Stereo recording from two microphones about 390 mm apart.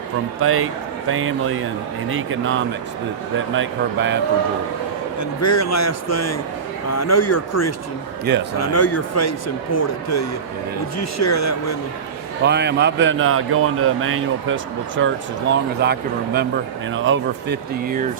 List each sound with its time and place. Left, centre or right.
0.4 s a man's voice: right
5.4 s a man's voice: left
12.4 s speech: right